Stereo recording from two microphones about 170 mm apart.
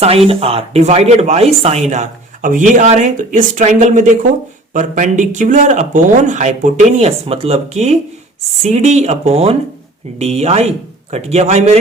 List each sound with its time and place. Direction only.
0.3 s speech: 35° right (ahead or behind)